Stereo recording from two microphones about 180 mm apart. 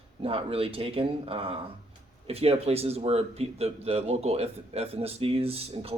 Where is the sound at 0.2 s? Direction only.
30° right (ahead or behind).